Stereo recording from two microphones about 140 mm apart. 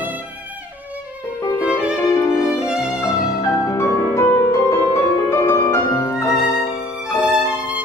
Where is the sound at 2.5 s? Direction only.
5° right (ahead or behind).